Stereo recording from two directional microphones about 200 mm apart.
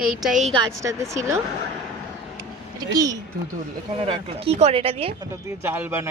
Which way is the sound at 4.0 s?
30° right (ahead or behind).